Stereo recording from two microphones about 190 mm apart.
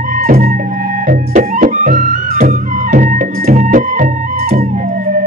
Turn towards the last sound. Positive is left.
turn(degrees=-40)  # may be behind; listen again after turning